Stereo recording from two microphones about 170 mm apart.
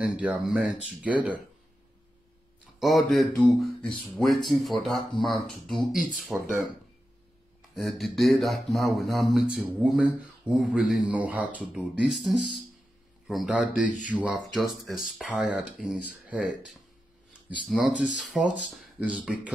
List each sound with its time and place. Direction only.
0.0 s speech: 5° right (ahead or behind)
2.8 s speech: centre (ahead or behind)
7.7 s speech: centre (ahead or behind)